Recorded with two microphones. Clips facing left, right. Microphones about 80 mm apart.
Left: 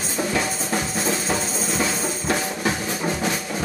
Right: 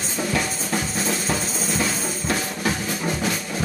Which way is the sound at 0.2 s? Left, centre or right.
Centre.